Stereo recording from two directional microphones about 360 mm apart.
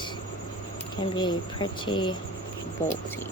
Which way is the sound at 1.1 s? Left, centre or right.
Centre.